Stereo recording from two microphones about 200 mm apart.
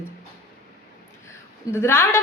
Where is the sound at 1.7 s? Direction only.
10° left (ahead or behind).